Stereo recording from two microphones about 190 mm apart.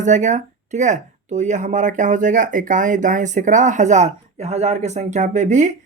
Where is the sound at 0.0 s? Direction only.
40° right (ahead or behind).